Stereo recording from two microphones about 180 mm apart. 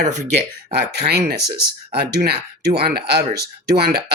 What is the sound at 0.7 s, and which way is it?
Speech, 65° right (ahead or behind).